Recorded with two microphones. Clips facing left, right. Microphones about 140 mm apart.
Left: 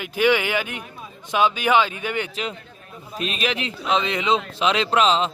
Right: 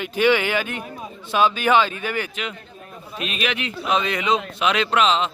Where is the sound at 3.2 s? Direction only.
35° left (ahead or behind).